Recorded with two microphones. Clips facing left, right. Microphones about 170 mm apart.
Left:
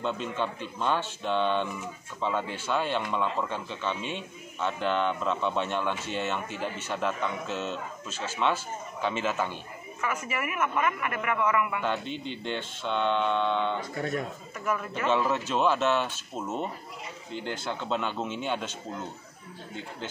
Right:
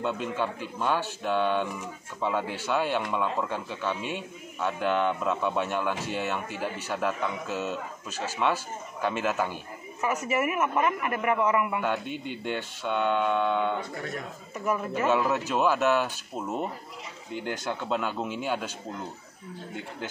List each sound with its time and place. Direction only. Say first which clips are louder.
0.0 s a man's voice: right 1 dB; 10° right (ahead or behind)
10.5 s a man's voice: right 2 dB; 25° right (ahead or behind)
11.8 s a man's voice: right 1 dB; 10° right (ahead or behind)
14.6 s speech: right 2 dB; 25° right (ahead or behind)
15.0 s a man's voice: even; 5° right (ahead or behind)